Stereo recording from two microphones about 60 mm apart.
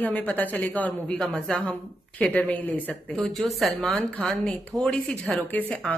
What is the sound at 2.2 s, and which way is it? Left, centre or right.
Speech, left.